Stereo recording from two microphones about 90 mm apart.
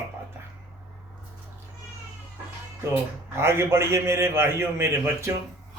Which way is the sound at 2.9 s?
25° right (ahead or behind).